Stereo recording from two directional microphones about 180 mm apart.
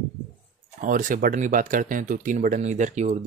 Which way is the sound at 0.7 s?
45° right (ahead or behind).